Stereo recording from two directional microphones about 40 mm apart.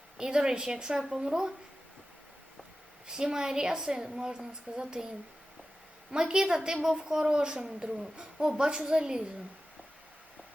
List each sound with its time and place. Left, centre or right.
0.2 s a woman's voice: centre
3.1 s a woman's voice: centre